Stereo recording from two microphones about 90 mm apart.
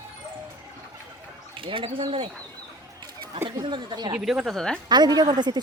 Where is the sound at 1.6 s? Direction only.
75° right (ahead or behind).